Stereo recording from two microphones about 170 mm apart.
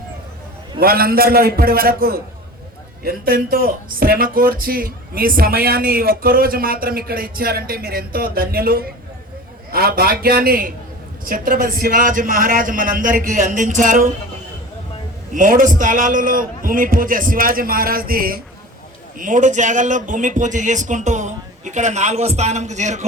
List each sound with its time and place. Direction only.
0.8 s a man's voice: 60° right (ahead or behind)
15.4 s speech: 50° right (ahead or behind)
19.2 s a man's voice: 50° right (ahead or behind)